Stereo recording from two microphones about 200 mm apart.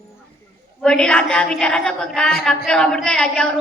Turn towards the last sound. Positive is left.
turn(degrees=5)  # may be behind; listen again after turning